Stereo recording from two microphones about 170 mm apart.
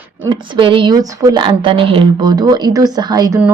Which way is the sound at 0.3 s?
25° right (ahead or behind).